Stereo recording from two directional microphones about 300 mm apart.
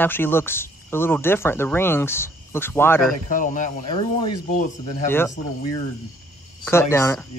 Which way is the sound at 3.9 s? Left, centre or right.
Centre.